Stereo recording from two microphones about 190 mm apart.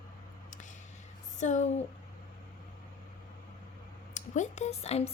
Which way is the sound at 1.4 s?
40° left (ahead or behind).